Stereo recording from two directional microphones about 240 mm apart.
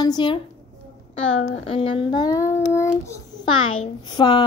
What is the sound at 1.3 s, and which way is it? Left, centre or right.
Speech, left.